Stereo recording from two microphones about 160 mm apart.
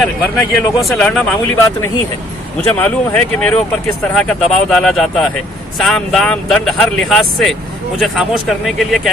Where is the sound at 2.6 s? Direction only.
10° left (ahead or behind).